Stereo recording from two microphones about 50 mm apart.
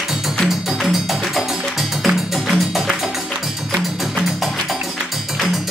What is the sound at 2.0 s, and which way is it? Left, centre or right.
Music, centre.